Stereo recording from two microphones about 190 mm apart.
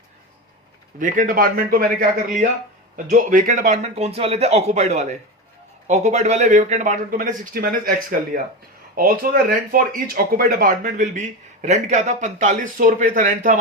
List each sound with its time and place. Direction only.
0.9 s speech: 45° right (ahead or behind)
9.0 s speech: 45° right (ahead or behind)